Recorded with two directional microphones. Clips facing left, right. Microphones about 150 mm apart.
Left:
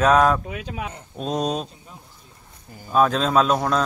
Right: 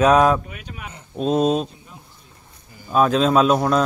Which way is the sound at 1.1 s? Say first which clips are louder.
Right 6 dB; centre (ahead or behind).